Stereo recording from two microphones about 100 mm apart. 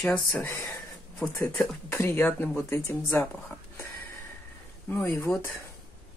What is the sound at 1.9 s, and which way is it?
Speech, 25° left (ahead or behind).